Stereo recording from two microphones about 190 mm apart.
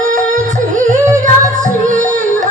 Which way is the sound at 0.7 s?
40° right (ahead or behind).